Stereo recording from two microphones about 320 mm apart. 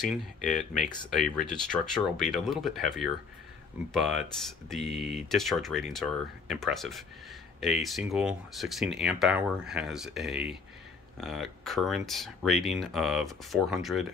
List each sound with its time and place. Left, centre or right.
0.1 s speech: centre